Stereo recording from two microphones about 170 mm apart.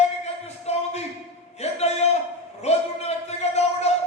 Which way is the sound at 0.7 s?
40° left (ahead or behind).